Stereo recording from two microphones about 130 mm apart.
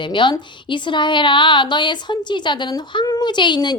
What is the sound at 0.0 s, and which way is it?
A woman's voice, 40° left (ahead or behind).